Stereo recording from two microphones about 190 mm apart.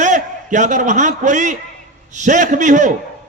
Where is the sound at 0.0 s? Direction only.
40° right (ahead or behind).